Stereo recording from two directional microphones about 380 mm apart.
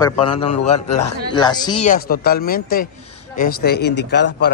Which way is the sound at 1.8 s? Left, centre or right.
Left.